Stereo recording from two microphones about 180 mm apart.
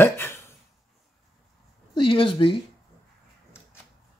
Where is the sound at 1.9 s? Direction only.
30° left (ahead or behind).